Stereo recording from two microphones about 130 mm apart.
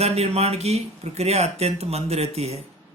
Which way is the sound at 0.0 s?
55° right (ahead or behind).